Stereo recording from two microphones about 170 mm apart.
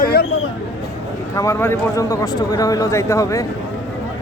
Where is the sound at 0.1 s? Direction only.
65° left (ahead or behind).